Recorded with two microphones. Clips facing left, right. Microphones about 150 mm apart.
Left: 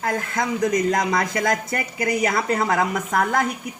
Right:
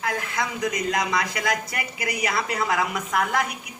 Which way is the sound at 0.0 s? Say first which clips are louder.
Left 3 dB; 45° left (ahead or behind).